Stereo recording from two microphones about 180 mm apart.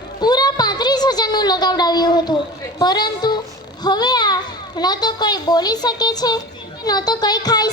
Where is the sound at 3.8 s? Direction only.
25° left (ahead or behind).